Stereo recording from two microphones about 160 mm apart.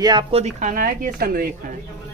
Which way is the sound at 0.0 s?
30° right (ahead or behind).